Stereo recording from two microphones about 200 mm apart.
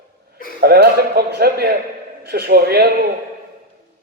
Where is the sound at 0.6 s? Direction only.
50° right (ahead or behind).